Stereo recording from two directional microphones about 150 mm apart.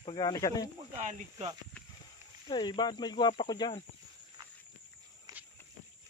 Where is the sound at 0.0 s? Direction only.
30° left (ahead or behind).